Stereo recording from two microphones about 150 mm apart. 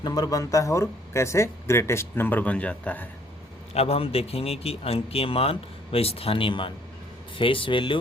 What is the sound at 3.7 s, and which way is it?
A man's voice, 40° left (ahead or behind).